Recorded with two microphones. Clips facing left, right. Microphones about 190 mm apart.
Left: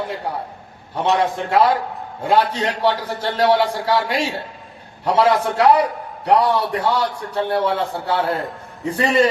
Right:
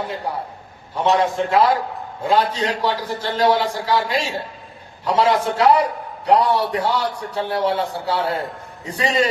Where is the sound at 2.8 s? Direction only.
60° left (ahead or behind).